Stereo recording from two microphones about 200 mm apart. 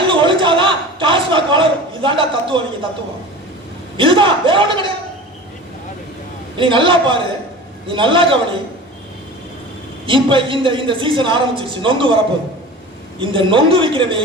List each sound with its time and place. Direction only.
0.0 s a man's voice: 25° right (ahead or behind)
3.9 s a woman's voice: 25° right (ahead or behind)
6.6 s a woman's voice: 25° right (ahead or behind)
10.1 s a woman's voice: 25° right (ahead or behind)